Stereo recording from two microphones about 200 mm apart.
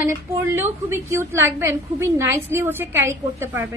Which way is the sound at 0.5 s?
10° right (ahead or behind).